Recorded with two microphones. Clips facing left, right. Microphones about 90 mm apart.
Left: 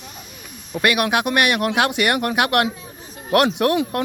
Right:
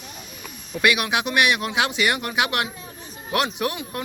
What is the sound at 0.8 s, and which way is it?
Speech, 50° left (ahead or behind).